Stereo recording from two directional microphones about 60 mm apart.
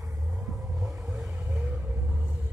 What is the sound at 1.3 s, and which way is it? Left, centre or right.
Vehicle, right.